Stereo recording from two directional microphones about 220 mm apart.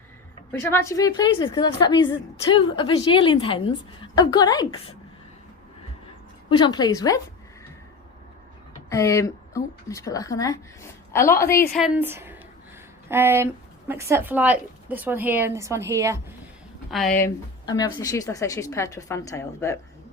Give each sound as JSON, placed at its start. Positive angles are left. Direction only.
{"t": 0.6, "sound": "a woman's voice", "side_deg": 10}
{"t": 6.5, "sound": "a woman's voice", "side_deg": 20}
{"t": 8.9, "sound": "a woman's voice", "side_deg": 15}
{"t": 11.8, "sound": "speech", "side_deg": -5}
{"t": 17.2, "sound": "a woman's voice", "side_deg": 15}